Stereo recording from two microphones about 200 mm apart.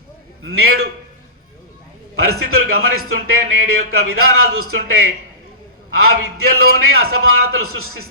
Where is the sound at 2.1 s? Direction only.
90° right.